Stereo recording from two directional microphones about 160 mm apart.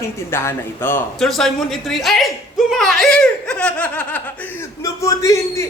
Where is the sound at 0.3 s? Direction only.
15° left (ahead or behind).